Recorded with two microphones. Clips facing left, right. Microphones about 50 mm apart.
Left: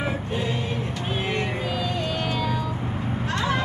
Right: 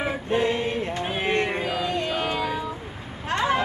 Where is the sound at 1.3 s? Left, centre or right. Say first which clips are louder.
Right 5 dB; right.